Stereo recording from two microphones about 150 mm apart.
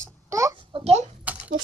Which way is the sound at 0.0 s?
20° right (ahead or behind).